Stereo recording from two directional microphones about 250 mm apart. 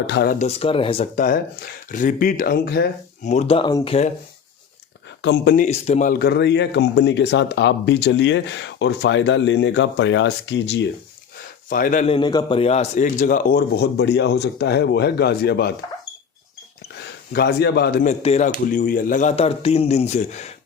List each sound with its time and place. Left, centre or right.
0.1 s a man's voice: left
0.3 s a man's voice: left
3.2 s speech: left
5.2 s speech: left
11.7 s a man's voice: left
17.0 s speech: left